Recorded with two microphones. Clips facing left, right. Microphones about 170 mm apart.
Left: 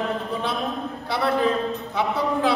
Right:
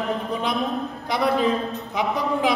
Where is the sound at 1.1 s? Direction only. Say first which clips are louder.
Right 1 dB; 15° right (ahead or behind).